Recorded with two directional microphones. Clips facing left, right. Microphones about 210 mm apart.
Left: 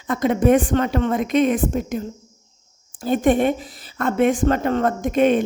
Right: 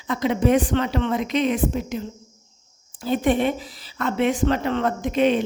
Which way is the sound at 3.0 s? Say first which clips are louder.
Left 3 dB; 45° left (ahead or behind).